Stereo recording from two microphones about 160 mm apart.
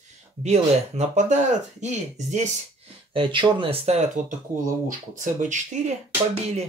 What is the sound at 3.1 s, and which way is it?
Speech, 30° right (ahead or behind).